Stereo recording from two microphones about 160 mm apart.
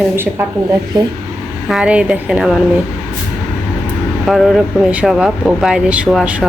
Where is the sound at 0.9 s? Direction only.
25° right (ahead or behind).